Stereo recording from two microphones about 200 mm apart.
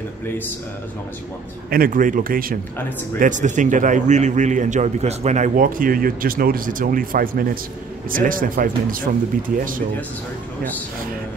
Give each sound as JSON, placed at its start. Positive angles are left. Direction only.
{"t": 1.7, "sound": "a man's voice", "side_deg": -45}